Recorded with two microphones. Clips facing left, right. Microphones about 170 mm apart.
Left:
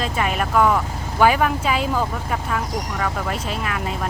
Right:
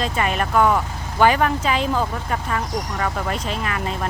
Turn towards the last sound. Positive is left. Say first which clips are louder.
# even
turn(degrees=0)  # may be behind; listen again after turning